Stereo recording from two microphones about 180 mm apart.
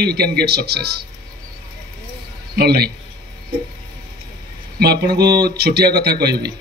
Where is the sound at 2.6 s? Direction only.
60° right (ahead or behind).